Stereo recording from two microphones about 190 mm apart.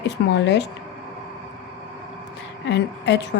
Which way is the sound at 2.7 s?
65° left (ahead or behind).